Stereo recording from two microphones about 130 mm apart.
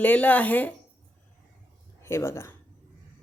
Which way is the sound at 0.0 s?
10° left (ahead or behind).